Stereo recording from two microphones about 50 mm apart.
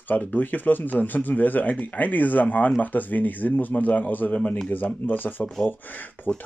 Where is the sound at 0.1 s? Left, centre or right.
Left.